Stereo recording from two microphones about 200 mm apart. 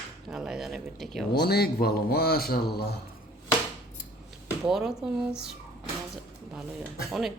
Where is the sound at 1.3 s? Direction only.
50° left (ahead or behind).